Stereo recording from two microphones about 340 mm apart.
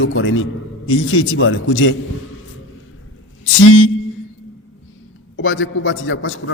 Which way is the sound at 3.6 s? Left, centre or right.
Left.